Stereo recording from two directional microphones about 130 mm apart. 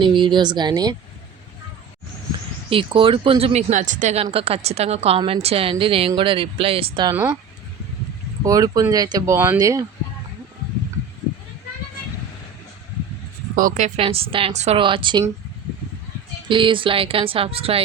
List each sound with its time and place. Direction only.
0.0 s speech: 40° right (ahead or behind)
2.6 s a woman's voice: 40° right (ahead or behind)
3.7 s speech: 70° right (ahead or behind)
4.2 s a woman's voice: 50° right (ahead or behind)
7.1 s speech: 15° right (ahead or behind)
8.4 s speech: 25° right (ahead or behind)
13.6 s speech: 80° right
14.0 s a woman's voice: 45° right (ahead or behind)
14.8 s speech: 40° right (ahead or behind)
16.5 s a woman's voice: 40° right (ahead or behind)